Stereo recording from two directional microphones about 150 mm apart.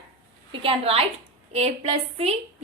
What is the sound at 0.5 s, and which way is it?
A woman's voice, 40° right (ahead or behind).